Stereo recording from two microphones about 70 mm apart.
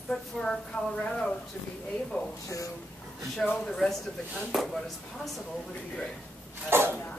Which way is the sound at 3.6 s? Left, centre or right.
Centre.